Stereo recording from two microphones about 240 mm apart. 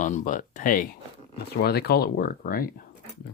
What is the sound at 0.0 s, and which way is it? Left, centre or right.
Speech, left.